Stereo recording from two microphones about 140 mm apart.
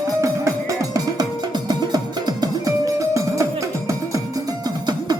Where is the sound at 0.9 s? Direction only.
30° right (ahead or behind).